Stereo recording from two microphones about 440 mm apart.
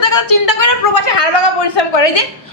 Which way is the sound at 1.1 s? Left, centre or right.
Left.